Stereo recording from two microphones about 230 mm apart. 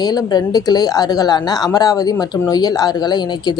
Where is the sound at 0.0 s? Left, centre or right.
Centre.